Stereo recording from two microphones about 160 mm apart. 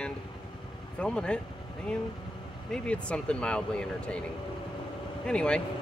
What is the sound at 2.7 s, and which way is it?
Speech, 5° left (ahead or behind).